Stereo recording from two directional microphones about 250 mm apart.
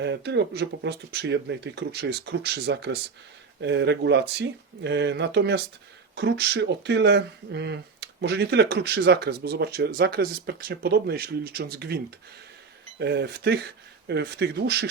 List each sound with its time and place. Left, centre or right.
0.0 s speech: right
13.0 s speech: right